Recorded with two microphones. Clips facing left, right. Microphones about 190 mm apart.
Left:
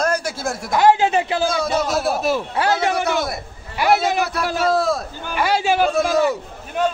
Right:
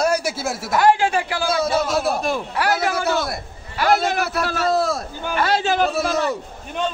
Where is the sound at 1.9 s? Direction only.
5° left (ahead or behind).